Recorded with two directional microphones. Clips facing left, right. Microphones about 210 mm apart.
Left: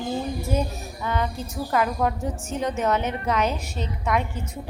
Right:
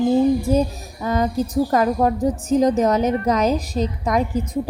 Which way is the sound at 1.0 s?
40° right (ahead or behind).